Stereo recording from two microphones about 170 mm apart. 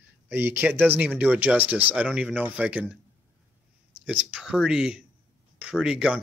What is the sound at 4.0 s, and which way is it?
Speech, 5° right (ahead or behind).